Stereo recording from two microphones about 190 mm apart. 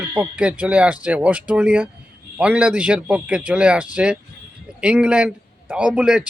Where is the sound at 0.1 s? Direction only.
5° right (ahead or behind).